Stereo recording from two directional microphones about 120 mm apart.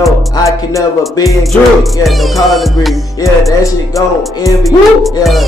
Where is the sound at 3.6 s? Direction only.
25° left (ahead or behind).